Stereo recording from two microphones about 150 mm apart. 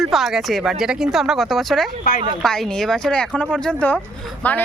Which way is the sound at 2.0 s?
75° left (ahead or behind).